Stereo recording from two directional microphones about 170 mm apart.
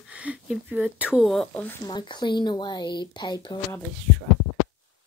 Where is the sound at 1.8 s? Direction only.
25° left (ahead or behind).